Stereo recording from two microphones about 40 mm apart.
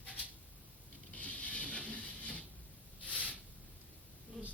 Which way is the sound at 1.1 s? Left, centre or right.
Left.